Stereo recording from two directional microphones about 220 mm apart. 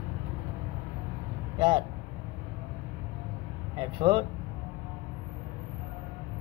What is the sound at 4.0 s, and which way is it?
Speech, 20° right (ahead or behind).